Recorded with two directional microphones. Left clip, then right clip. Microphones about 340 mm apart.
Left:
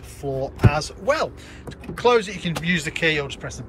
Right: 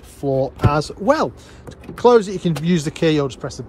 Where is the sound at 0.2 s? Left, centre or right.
Right.